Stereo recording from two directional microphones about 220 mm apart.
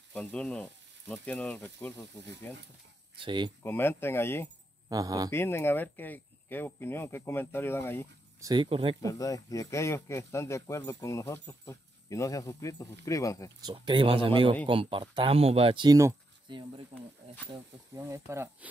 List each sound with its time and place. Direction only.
0.1 s speech: 5° left (ahead or behind)
3.2 s speech: 20° right (ahead or behind)
3.6 s speech: 10° left (ahead or behind)
4.8 s speech: 15° right (ahead or behind)
5.3 s speech: 10° left (ahead or behind)
8.4 s speech: 20° right (ahead or behind)
9.0 s speech: 15° left (ahead or behind)
13.7 s speech: 20° right (ahead or behind)